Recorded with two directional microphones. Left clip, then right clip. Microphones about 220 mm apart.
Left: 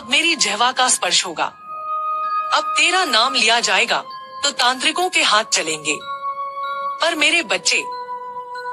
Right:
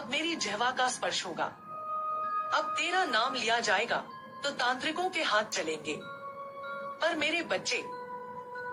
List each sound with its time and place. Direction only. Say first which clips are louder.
0.1 s speech: left 16 dB; 45° left (ahead or behind)